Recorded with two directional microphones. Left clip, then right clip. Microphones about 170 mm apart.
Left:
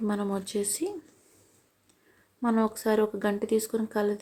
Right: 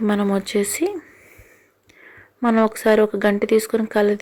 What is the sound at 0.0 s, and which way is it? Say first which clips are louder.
Speech: right 10 dB; 25° right (ahead or behind).